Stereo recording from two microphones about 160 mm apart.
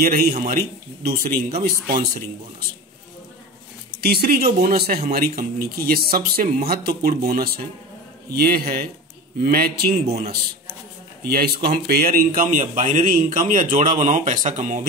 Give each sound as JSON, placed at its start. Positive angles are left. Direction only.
{"t": 0.0, "sound": "a man's voice", "side_deg": -65}
{"t": 4.0, "sound": "a man's voice", "side_deg": -75}
{"t": 11.2, "sound": "speech", "side_deg": -70}
{"t": 12.4, "sound": "a man's voice", "side_deg": -55}